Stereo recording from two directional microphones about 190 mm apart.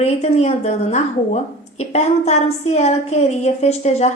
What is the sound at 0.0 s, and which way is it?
A woman's voice, 35° left (ahead or behind).